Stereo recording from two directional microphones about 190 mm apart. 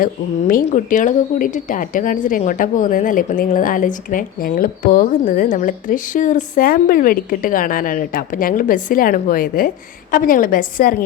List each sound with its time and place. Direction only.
0.0 s speech: 45° left (ahead or behind)